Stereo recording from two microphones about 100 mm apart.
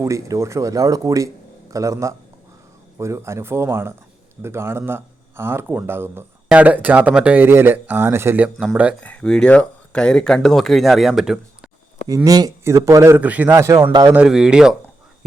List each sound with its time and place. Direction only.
0.0 s speech: 30° right (ahead or behind)
8.5 s speech: centre (ahead or behind)
9.0 s speech: 10° left (ahead or behind); by 11.7 s 5° right (ahead or behind)
12.0 s speech: 40° right (ahead or behind)
13.2 s speech: 15° right (ahead or behind)
14.3 s speech: 5° right (ahead or behind)